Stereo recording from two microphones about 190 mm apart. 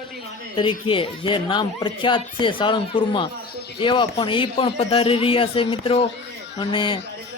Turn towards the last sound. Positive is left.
turn(degrees=25)  # may be behind; listen again after turning